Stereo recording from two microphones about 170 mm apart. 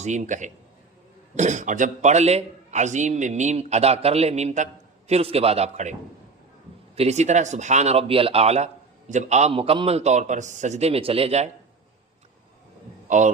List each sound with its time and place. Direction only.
0.0 s a man's voice: 45° right (ahead or behind)
13.1 s a man's voice: 45° right (ahead or behind)